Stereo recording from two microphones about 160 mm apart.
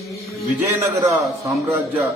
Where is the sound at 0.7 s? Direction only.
20° right (ahead or behind).